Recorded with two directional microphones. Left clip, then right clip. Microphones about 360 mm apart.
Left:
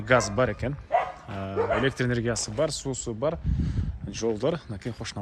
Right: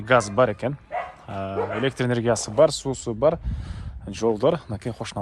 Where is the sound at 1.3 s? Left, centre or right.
Centre.